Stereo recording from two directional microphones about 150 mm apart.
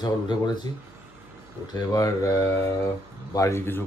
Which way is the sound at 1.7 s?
25° left (ahead or behind).